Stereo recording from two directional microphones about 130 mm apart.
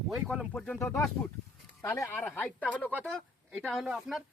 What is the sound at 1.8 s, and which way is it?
Speech, 15° left (ahead or behind).